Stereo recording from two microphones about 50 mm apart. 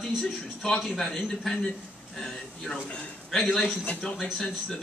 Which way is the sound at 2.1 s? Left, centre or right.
Centre.